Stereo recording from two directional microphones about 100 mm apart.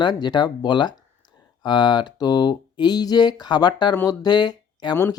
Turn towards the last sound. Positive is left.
turn(degrees=45)  # may be behind; listen again after turning